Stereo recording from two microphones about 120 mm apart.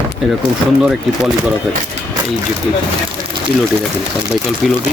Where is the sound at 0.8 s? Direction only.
5° right (ahead or behind).